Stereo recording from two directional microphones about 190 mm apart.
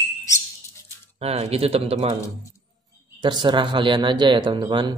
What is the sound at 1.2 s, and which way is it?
Speech, 30° right (ahead or behind).